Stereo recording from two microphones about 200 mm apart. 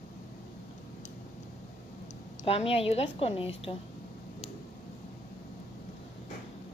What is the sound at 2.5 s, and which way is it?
Speech, 30° left (ahead or behind).